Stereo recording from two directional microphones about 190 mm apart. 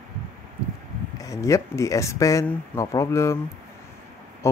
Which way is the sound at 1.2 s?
15° left (ahead or behind).